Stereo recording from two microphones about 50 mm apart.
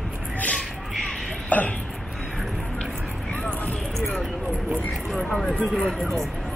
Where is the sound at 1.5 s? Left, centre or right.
Left.